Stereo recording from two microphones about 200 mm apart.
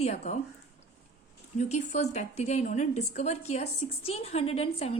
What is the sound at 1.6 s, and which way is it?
A woman's voice, 35° left (ahead or behind).